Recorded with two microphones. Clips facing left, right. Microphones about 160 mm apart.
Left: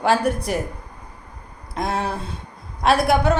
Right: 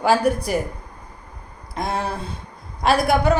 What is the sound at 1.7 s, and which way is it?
A woman's voice, centre (ahead or behind).